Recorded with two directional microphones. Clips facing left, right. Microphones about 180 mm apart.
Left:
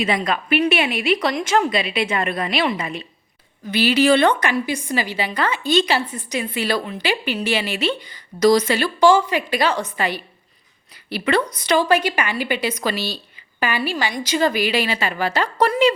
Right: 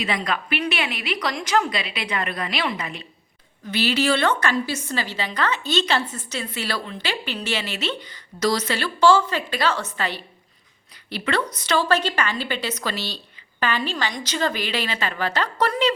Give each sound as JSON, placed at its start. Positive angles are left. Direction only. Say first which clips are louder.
{"t": 0.0, "sound": "a woman's voice", "louder": "left 4 dB", "side_deg": 20}
{"t": 3.7, "sound": "a woman's voice", "louder": "left 5 dB", "side_deg": 15}